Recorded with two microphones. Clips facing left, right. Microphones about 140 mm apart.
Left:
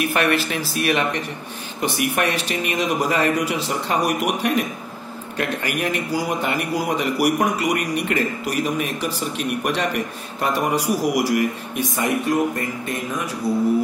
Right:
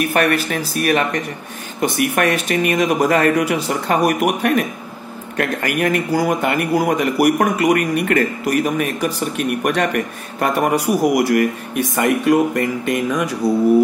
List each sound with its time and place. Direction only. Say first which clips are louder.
0.0 s speech: right 3 dB; 50° right (ahead or behind)
1.8 s speech: right 4 dB; 55° right (ahead or behind); by 13.3 s 80° right